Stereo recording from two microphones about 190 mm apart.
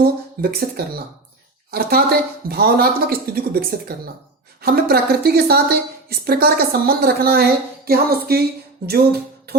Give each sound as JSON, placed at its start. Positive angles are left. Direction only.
{"t": 0.0, "sound": "a woman's voice", "side_deg": -50}
{"t": 9.5, "sound": "music", "side_deg": -55}